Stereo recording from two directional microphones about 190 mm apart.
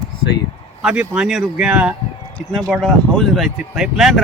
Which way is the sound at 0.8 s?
5° right (ahead or behind).